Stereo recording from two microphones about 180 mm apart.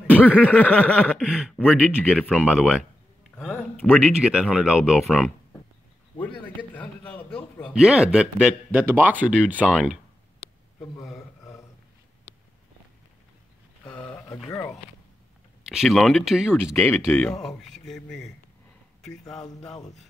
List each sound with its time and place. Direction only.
0.1 s a sound: 10° left (ahead or behind)
1.2 s speech: 5° right (ahead or behind)
3.3 s a sound: 5° left (ahead or behind)
4.1 s speech: 5° right (ahead or behind)
6.4 s a man's voice: 10° left (ahead or behind)
7.7 s speech: 5° right (ahead or behind)
13.8 s a sound: 10° left (ahead or behind)
15.7 s speech: centre (ahead or behind)
19.6 s speech: 20° left (ahead or behind)